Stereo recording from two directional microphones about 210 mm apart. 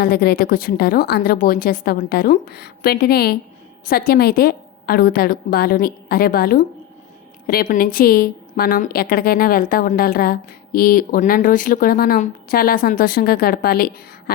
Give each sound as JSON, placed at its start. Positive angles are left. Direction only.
{"t": 0.0, "sound": "a woman's voice", "side_deg": 50}